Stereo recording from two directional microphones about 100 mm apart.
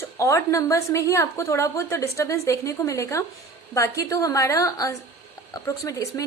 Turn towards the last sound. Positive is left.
turn(degrees=35)  # may be behind; listen again after turning